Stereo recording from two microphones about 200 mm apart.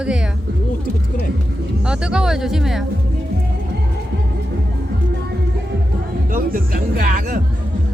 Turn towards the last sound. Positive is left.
turn(degrees=-45)  # may be behind; listen again after turning